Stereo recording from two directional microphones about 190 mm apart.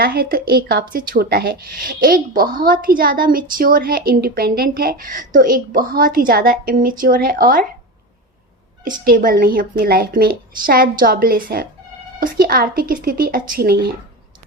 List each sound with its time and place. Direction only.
0.0 s speech: 55° right (ahead or behind)
9.0 s speech: 50° right (ahead or behind)